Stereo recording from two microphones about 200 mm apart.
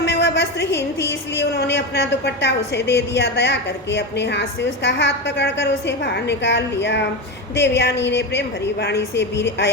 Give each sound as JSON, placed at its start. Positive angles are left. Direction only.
{"t": 0.0, "sound": "a woman's voice", "side_deg": 60}